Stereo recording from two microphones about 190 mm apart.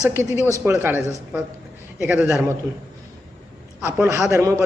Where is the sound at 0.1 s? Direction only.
15° right (ahead or behind).